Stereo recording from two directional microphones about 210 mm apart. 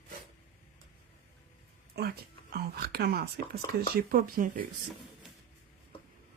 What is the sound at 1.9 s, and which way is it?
Speech, 50° right (ahead or behind).